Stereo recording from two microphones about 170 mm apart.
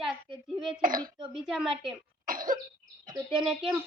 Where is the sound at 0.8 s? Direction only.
55° right (ahead or behind).